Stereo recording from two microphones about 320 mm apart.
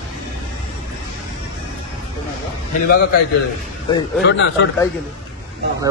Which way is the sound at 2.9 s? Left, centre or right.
Left.